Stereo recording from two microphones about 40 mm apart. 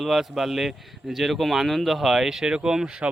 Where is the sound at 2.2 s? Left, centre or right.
Centre.